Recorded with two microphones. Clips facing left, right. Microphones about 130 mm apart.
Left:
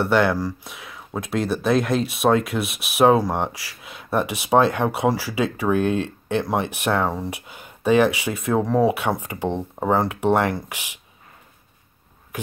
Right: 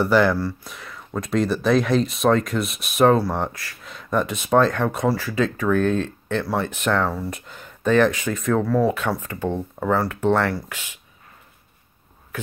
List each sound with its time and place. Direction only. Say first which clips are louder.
0.0 s speech: right 1 dB; centre (ahead or behind)